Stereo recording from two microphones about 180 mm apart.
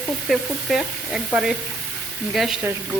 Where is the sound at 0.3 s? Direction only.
Centre (ahead or behind).